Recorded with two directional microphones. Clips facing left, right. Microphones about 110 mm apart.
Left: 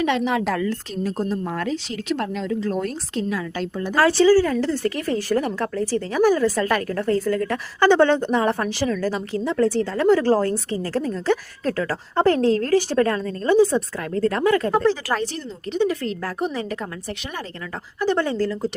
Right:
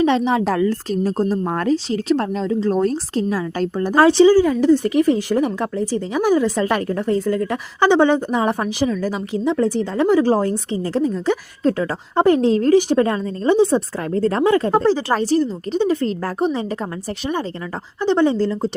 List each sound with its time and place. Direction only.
0.0 s a woman's voice: 30° right (ahead or behind)
3.9 s a woman's voice: 20° right (ahead or behind)